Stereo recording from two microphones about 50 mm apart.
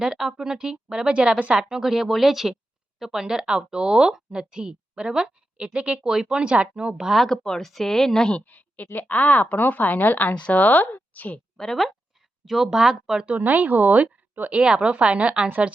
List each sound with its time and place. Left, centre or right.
0.0 s speech: centre
1.7 s speech: centre
7.1 s speech: centre
8.4 s a woman's voice: left
11.5 s speech: centre
12.5 s speech: centre
13.2 s speech: right
14.6 s a woman's voice: centre